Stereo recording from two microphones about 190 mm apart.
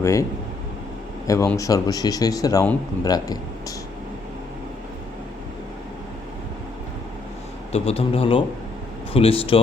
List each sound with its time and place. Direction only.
0.0 s speech: 15° left (ahead or behind)
1.3 s speech: 15° left (ahead or behind)
7.7 s a man's voice: 30° left (ahead or behind)